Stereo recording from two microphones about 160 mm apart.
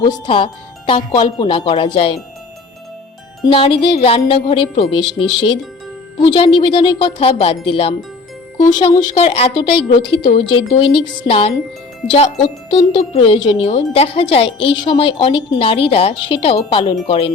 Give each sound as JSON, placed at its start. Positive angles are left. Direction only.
{"t": 0.0, "sound": "speech", "side_deg": 30}
{"t": 3.5, "sound": "speech", "side_deg": 35}
{"t": 6.1, "sound": "speech", "side_deg": 30}
{"t": 9.1, "sound": "speech", "side_deg": 40}